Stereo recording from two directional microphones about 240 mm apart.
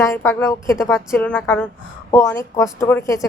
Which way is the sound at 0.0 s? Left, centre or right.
Centre.